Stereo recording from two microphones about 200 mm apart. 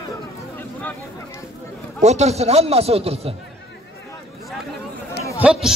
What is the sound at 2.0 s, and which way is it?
A man's voice, 35° right (ahead or behind).